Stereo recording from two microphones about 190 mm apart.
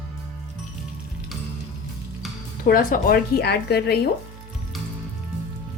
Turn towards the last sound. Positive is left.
turn(degrees=55)  # may be behind; listen again after turning